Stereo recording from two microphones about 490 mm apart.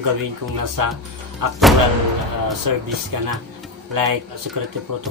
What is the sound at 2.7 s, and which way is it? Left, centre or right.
Speech, right.